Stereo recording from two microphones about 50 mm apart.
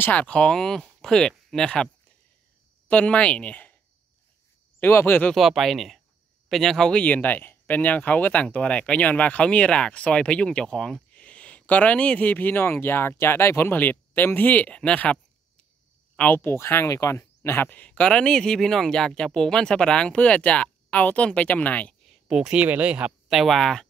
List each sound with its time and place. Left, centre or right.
0.0 s speech: left
2.9 s speech: left
4.7 s speech: left
5.4 s speech: centre
6.9 s speech: left; by 11.0 s centre
11.1 s speech: left
13.7 s speech: left
16.3 s speech: left
17.6 s speech: left
18.1 s speech: centre; by 21.9 s left
22.3 s speech: centre
22.6 s speech: right
23.2 s speech: centre